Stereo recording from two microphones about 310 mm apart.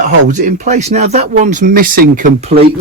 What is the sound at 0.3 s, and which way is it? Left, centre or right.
Speech, right.